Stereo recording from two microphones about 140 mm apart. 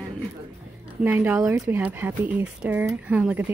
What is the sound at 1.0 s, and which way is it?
Speech, 10° right (ahead or behind).